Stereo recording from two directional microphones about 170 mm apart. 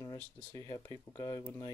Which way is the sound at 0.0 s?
20° left (ahead or behind).